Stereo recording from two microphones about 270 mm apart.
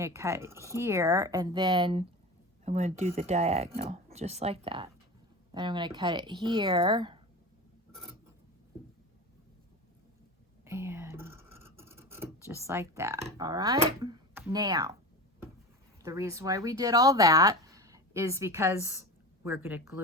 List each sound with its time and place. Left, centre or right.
0.0 s speech: centre
10.7 s scratch: centre
13.2 s speech: centre
16.0 s speech: centre